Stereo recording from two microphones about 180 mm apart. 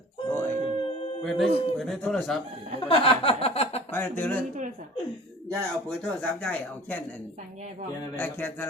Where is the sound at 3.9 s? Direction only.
10° left (ahead or behind).